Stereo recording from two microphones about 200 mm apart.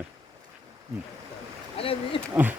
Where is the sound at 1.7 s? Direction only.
25° left (ahead or behind).